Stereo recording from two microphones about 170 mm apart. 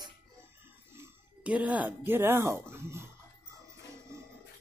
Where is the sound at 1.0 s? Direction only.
10° right (ahead or behind).